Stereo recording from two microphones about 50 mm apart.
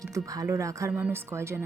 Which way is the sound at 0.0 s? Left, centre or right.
Right.